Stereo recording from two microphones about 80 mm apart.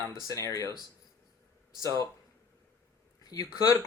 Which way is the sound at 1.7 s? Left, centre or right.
Right.